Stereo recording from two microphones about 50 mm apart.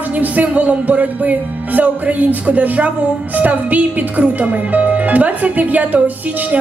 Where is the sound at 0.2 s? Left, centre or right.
Right.